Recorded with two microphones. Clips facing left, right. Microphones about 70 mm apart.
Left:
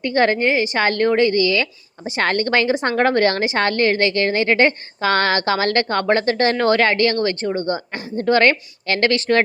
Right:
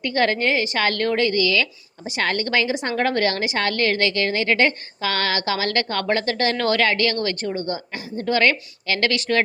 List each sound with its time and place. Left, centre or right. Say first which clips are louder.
0.0 s a woman's voice: left 4 dB; left
2.2 s a woman's voice: left 4 dB; left